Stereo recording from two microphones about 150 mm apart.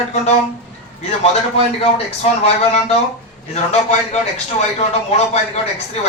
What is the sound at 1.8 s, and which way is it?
Speech, 45° left (ahead or behind).